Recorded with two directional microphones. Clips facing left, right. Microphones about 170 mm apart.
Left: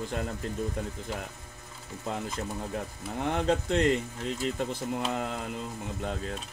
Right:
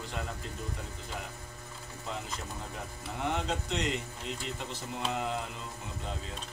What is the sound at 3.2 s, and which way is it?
Speech, 50° left (ahead or behind).